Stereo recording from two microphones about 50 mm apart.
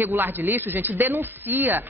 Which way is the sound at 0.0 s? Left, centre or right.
Right.